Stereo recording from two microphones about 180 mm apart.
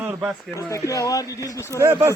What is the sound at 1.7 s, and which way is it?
Speech, 15° right (ahead or behind).